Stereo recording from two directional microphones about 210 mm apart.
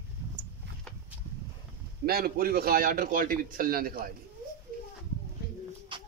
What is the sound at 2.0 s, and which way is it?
A man's voice, 45° right (ahead or behind).